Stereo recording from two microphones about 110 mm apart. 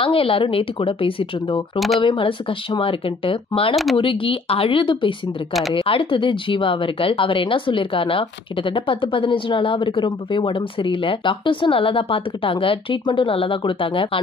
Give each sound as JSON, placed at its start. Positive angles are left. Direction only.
{"t": 0.0, "sound": "a woman's voice", "side_deg": 55}
{"t": 3.7, "sound": "speech", "side_deg": 0}
{"t": 4.0, "sound": "speech", "side_deg": 55}
{"t": 5.5, "sound": "speech", "side_deg": 0}
{"t": 5.8, "sound": "speech", "side_deg": 55}